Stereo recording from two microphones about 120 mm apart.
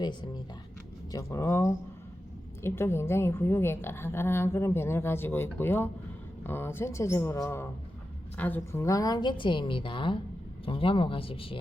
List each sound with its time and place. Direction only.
0.0 s a woman's voice: 40° left (ahead or behind)
1.1 s a woman's voice: 25° left (ahead or behind); by 11.5 s 50° left (ahead or behind)